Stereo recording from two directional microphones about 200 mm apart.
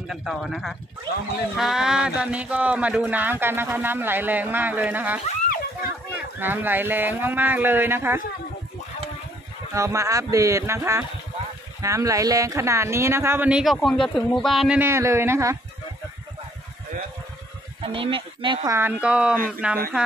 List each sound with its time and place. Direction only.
0.1 s speech: centre (ahead or behind)
5.2 s splash: 35° left (ahead or behind)
6.4 s speech: 10° right (ahead or behind)
9.8 s speech: 15° right (ahead or behind)
17.8 s speech: 25° right (ahead or behind); by 19.8 s 5° right (ahead or behind)